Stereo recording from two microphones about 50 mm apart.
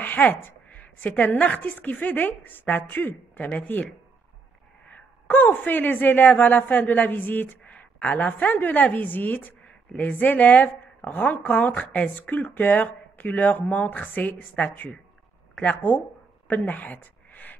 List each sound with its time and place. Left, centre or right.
0.0 s a woman's voice: left
4.8 s a woman's voice: left
16.4 s a sound: left